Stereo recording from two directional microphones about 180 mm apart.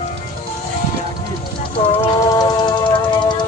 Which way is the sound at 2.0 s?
20° left (ahead or behind).